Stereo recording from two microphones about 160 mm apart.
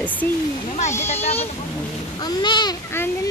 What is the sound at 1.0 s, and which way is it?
Speech, 40° left (ahead or behind).